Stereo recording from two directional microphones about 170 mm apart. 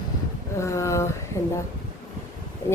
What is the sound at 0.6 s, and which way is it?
Speech, 15° left (ahead or behind).